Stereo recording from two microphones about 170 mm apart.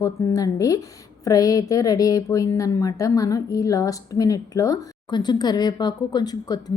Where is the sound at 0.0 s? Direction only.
20° left (ahead or behind).